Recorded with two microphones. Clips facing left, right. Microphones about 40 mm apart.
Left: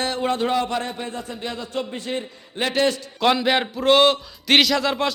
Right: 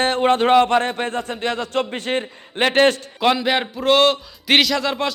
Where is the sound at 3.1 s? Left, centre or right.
Centre.